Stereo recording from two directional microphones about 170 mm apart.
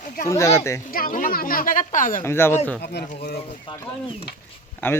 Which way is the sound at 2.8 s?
75° left (ahead or behind).